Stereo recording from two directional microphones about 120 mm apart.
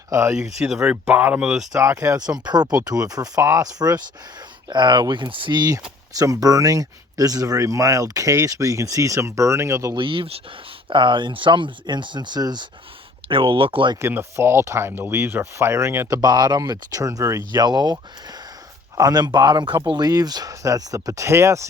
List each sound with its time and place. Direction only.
0.1 s speech: 25° right (ahead or behind)
0.6 s speech: 5° right (ahead or behind)
1.7 s speech: 25° right (ahead or behind)
9.9 s speech: 45° right (ahead or behind)
13.2 s speech: 45° right (ahead or behind)
14.1 s speech: 20° right (ahead or behind)
17.5 s speech: 35° right (ahead or behind)
18.9 s speech: 35° right (ahead or behind)